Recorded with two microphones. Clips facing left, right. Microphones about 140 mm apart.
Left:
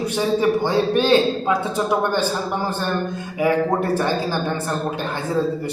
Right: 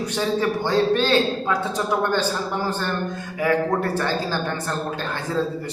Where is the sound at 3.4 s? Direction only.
15° left (ahead or behind).